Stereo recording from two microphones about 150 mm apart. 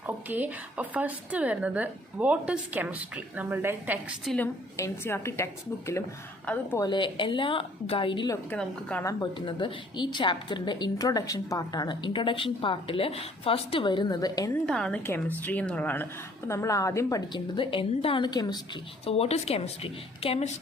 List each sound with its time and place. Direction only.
0.3 s speech: 10° right (ahead or behind)
4.3 s a woman's voice: centre (ahead or behind)
4.8 s a woman's voice: 15° left (ahead or behind)
6.8 s a woman's voice: 30° left (ahead or behind)
8.4 s speech: 10° left (ahead or behind)
9.0 s a woman's voice: 30° left (ahead or behind)
14.7 s a woman's voice: 5° left (ahead or behind); by 18.6 s 25° left (ahead or behind)
19.0 s a woman's voice: 40° left (ahead or behind)